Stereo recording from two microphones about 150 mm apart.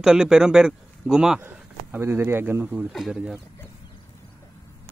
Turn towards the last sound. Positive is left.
turn(degrees=-5)  # may be behind; listen again after turning